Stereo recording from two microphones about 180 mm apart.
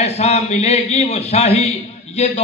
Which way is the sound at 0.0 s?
35° left (ahead or behind).